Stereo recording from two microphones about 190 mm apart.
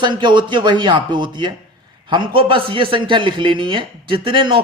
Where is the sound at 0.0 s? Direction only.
25° right (ahead or behind).